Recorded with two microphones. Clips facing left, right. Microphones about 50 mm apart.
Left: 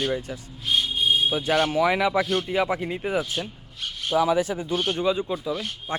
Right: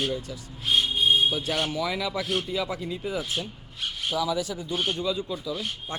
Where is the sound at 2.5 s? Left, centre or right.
Left.